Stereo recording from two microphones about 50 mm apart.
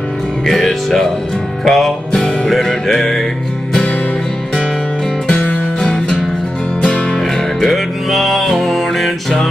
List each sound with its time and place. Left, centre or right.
0.5 s music: centre
5.3 s music: left
7.6 s music: centre